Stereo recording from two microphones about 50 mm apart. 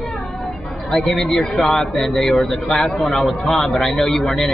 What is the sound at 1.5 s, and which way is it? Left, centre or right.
A man's voice, centre.